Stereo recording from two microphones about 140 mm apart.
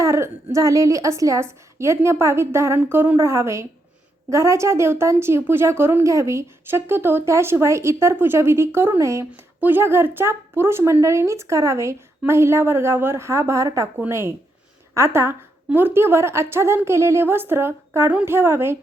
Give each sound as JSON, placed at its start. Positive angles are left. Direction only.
{"t": 0.0, "sound": "a woman's voice", "side_deg": -20}